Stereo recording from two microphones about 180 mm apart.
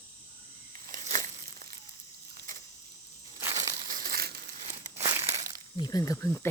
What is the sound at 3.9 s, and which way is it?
Crumpling, 55° right (ahead or behind).